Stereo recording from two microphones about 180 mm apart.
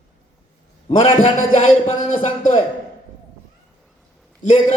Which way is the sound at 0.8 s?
35° left (ahead or behind).